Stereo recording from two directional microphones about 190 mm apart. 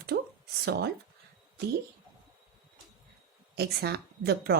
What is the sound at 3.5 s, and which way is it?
Speech, 60° right (ahead or behind).